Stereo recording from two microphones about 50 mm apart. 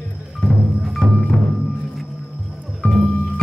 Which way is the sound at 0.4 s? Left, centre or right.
Centre.